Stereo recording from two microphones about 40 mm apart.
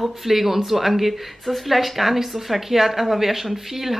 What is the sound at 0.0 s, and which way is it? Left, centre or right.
Speech, centre.